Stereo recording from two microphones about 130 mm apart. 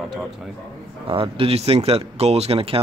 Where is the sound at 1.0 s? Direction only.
45° right (ahead or behind).